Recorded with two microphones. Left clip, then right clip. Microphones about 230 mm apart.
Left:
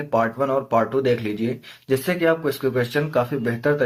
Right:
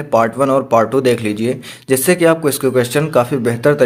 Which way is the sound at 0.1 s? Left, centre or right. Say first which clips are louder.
Right 8 dB; right.